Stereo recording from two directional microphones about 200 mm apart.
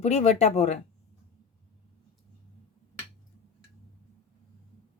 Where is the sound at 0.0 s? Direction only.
35° left (ahead or behind).